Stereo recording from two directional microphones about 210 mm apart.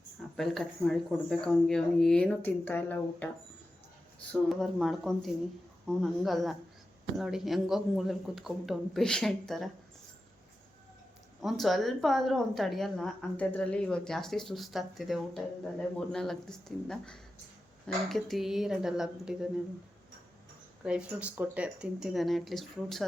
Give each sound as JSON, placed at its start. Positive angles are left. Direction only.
{"t": 0.3, "sound": "a woman's voice", "side_deg": 0}
{"t": 4.3, "sound": "a woman's voice", "side_deg": 0}
{"t": 11.4, "sound": "a woman's voice", "side_deg": 0}
{"t": 20.8, "sound": "a woman's voice", "side_deg": -5}